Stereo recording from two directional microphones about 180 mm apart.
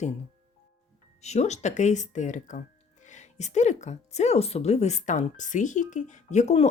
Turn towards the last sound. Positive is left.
turn(degrees=35)  # may be behind; listen again after turning